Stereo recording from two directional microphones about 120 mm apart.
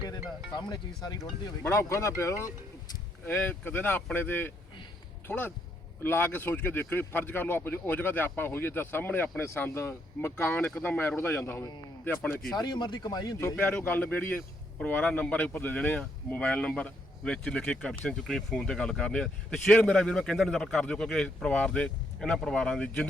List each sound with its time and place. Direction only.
0.0 s speech: 35° left (ahead or behind)
1.6 s speech: 20° left (ahead or behind)
12.5 s speech: 35° left (ahead or behind)
13.6 s speech: 10° left (ahead or behind)